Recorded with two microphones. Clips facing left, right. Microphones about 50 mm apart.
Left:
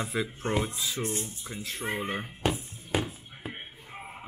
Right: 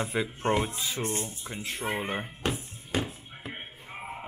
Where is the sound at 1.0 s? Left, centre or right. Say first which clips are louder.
Right 2 dB; right.